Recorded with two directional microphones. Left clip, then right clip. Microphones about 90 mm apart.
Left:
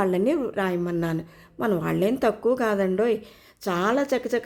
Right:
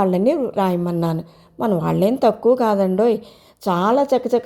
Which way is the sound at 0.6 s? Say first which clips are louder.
Right 6 dB; 45° right (ahead or behind).